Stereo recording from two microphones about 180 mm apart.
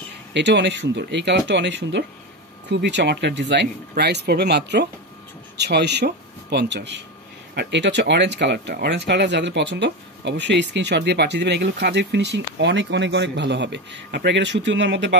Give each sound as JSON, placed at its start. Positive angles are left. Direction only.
{"t": 0.3, "sound": "a man's voice", "side_deg": -75}